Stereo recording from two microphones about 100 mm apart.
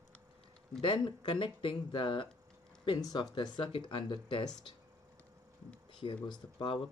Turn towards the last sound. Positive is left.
turn(degrees=50)  # may be behind; listen again after turning